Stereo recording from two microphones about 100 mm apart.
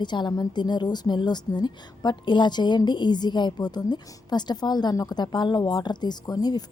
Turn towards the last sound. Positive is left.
turn(degrees=40)  # may be behind; listen again after turning